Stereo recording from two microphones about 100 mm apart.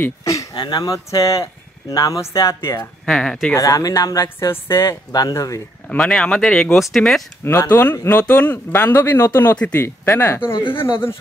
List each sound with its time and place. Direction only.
0.2 s a sound: 35° left (ahead or behind)
0.6 s speech: 45° left (ahead or behind); by 2.9 s 30° left (ahead or behind)
3.1 s speech: 5° left (ahead or behind)
3.5 s speech: 35° left (ahead or behind)
5.9 s speech: 10° left (ahead or behind)
7.7 s speech: 25° left (ahead or behind)